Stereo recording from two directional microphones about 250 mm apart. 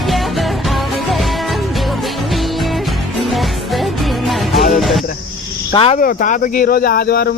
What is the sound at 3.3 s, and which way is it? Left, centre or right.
Music, centre.